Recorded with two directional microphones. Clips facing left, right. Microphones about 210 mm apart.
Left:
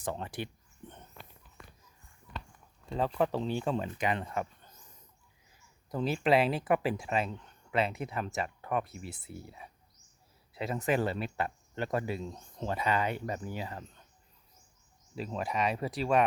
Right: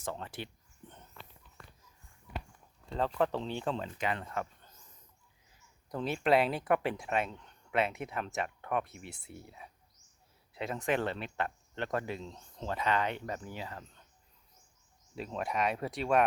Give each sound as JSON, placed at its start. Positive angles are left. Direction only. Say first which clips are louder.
{"t": 0.0, "sound": "speech", "louder": "left 3 dB", "side_deg": 15}
{"t": 2.9, "sound": "speech", "louder": "left 1 dB", "side_deg": 10}
{"t": 5.9, "sound": "speech", "louder": "left 1 dB", "side_deg": 0}
{"t": 15.1, "sound": "speech", "louder": "left 1 dB", "side_deg": 0}